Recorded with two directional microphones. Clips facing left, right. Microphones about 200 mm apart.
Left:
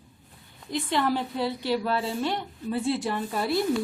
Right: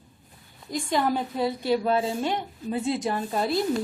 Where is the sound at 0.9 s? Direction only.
15° right (ahead or behind).